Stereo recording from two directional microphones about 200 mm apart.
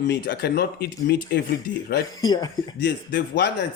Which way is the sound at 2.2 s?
20° left (ahead or behind).